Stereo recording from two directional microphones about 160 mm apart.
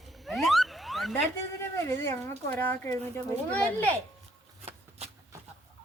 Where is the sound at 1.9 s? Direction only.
15° left (ahead or behind).